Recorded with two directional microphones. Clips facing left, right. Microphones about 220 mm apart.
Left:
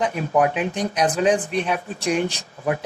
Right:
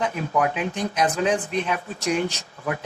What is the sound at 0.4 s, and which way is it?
Speech, 15° left (ahead or behind).